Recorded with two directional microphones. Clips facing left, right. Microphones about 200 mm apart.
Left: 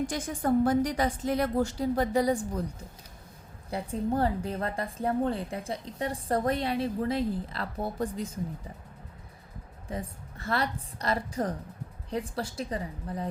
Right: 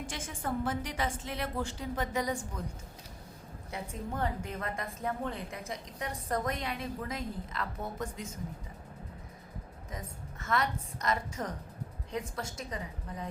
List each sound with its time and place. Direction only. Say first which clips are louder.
0.1 s a woman's voice: left 9 dB; 40° left (ahead or behind)
3.7 s a woman's voice: left 9 dB; 35° left (ahead or behind)
9.9 s a woman's voice: left 7 dB; 30° left (ahead or behind)